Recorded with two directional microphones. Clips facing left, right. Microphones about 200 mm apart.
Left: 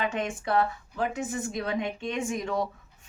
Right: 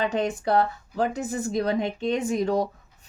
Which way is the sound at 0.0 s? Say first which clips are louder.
Right 5 dB; 35° right (ahead or behind).